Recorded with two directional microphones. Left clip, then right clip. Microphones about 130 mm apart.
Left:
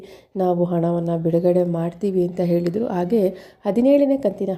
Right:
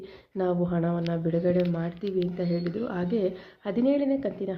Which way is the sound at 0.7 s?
45° left (ahead or behind).